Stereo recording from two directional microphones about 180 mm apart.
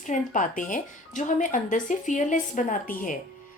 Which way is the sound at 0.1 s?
45° left (ahead or behind).